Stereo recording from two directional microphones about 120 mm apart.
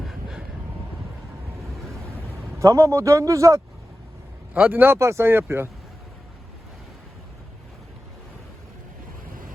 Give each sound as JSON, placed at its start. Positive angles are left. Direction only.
{"t": 0.0, "sound": "vehicle", "side_deg": 0}
{"t": 2.6, "sound": "speech", "side_deg": -25}
{"t": 4.5, "sound": "speech", "side_deg": -10}